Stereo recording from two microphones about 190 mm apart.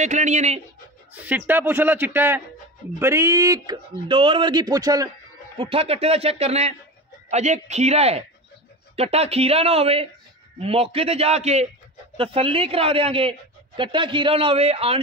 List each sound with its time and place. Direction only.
0.0 s speech: 40° right (ahead or behind)
1.2 s a man's voice: 10° right (ahead or behind)
5.6 s a woman's voice: 30° right (ahead or behind)